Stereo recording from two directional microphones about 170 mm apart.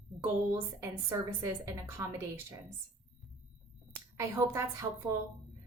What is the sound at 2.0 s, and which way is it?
Speech, 15° right (ahead or behind).